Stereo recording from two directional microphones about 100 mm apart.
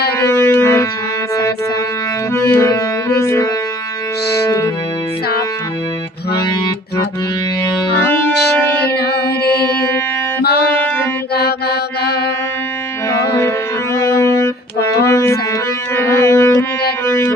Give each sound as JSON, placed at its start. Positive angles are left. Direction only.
{"t": 0.3, "sound": "music", "side_deg": 30}
{"t": 2.6, "sound": "music", "side_deg": 35}
{"t": 8.0, "sound": "music", "side_deg": 15}
{"t": 10.8, "sound": "music", "side_deg": 15}
{"t": 13.1, "sound": "music", "side_deg": 30}